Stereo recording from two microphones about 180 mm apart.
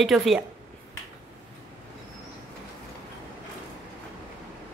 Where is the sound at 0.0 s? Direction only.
Centre (ahead or behind).